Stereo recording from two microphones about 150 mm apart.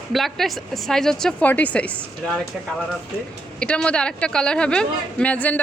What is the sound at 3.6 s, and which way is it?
A woman's voice, 10° left (ahead or behind).